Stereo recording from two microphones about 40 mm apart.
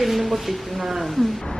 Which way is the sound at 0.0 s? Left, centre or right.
Centre.